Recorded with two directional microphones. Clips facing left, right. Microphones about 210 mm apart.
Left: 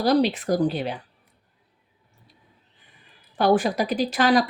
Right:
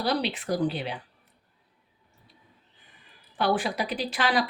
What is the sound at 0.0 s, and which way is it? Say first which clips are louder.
Speech: left 8 dB; 45° left (ahead or behind).